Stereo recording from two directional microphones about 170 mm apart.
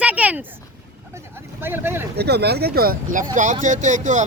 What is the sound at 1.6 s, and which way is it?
Speech, 10° right (ahead or behind).